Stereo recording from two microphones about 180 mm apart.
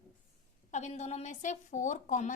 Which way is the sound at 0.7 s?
40° left (ahead or behind).